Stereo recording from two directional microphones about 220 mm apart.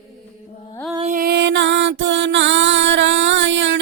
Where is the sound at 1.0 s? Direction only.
35° right (ahead or behind).